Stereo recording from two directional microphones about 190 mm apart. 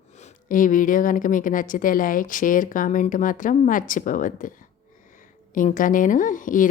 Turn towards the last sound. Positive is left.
turn(degrees=45)  # may be behind; listen again after turning